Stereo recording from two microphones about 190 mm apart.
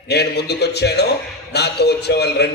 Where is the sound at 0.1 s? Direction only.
60° left (ahead or behind).